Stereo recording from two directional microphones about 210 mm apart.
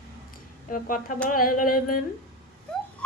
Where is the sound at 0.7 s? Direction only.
40° left (ahead or behind).